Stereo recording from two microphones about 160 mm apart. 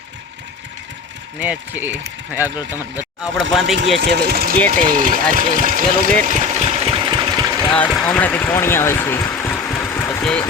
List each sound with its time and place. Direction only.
1.4 s speech: 10° right (ahead or behind)
3.3 s speech: centre (ahead or behind)
3.8 s speech: 90° right; by 4.5 s 70° right (ahead or behind)
4.7 s speech: 55° right (ahead or behind); by 7.6 s 25° right (ahead or behind)
7.9 s speech: centre (ahead or behind)
8.1 s a sound: 10° left (ahead or behind)